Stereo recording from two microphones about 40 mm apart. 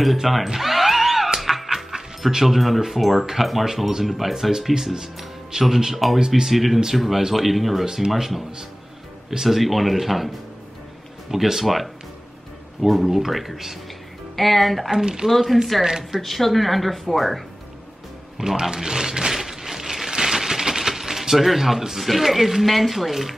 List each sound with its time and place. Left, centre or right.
0.0 s speech: centre
0.6 s music: centre
1.7 s speech: centre
7.8 s speech: centre
14.9 s speech: centre
15.2 s speech: centre
18.4 s a sound: centre